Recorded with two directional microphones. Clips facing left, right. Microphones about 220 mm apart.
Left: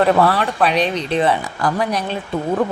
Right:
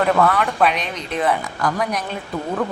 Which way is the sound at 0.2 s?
30° left (ahead or behind).